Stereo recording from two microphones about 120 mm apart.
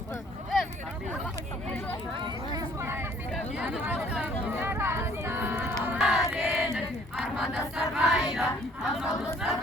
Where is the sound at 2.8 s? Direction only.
20° right (ahead or behind).